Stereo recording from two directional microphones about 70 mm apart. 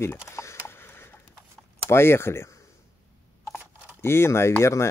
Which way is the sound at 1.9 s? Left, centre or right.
Left.